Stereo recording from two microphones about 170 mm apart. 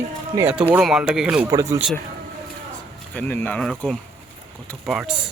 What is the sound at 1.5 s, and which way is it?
Speech, 20° right (ahead or behind).